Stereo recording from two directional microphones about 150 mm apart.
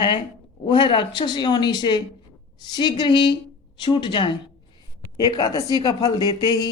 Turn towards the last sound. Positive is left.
turn(degrees=25)  # may be behind; listen again after turning